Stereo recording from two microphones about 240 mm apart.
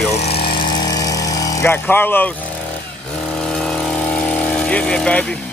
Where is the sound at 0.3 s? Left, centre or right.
Left.